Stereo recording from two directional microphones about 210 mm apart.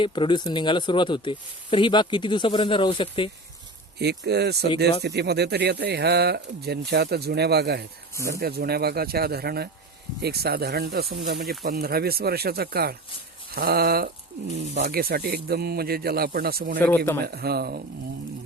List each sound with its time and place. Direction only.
0.0 s speech: 25° left (ahead or behind)
4.3 s speech: 50° right (ahead or behind)